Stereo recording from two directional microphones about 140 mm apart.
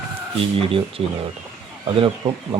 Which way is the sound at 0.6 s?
40° right (ahead or behind).